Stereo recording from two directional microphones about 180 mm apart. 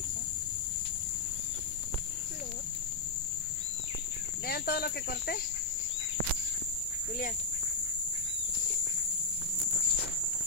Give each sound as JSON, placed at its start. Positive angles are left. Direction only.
{"t": 4.5, "sound": "cricket", "side_deg": 60}